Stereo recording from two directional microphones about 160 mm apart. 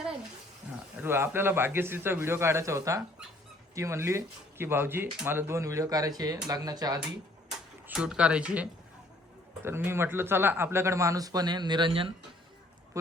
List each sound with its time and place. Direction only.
1.0 s speech: 15° right (ahead or behind)
7.9 s speech: 5° right (ahead or behind)
9.6 s speech: 15° right (ahead or behind); by 12.1 s 30° right (ahead or behind)